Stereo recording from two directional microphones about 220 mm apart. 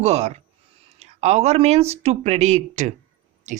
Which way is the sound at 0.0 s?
30° right (ahead or behind).